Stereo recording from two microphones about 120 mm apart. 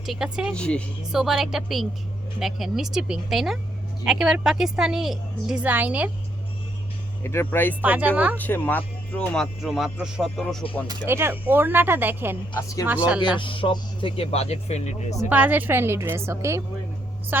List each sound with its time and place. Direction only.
0.0 s speech: 5° right (ahead or behind)
0.5 s a woman's voice: 10° left (ahead or behind)
1.1 s speech: 5° right (ahead or behind)
5.6 s speech: 15° right (ahead or behind)
7.3 s speech: 20° left (ahead or behind)
7.8 s speech: 15° right (ahead or behind)
8.4 s speech: 15° left (ahead or behind); by 10.6 s centre (ahead or behind)
11.0 s speech: 20° right (ahead or behind)
12.5 s speech: 25° left (ahead or behind)
13.4 s speech: 45° left (ahead or behind); by 15.3 s 75° left (ahead or behind)
15.3 s a woman's voice: 15° right (ahead or behind)